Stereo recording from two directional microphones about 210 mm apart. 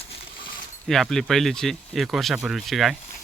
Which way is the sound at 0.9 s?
Centre (ahead or behind).